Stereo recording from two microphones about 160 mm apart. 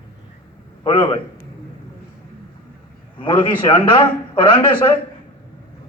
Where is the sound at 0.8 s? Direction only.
30° left (ahead or behind).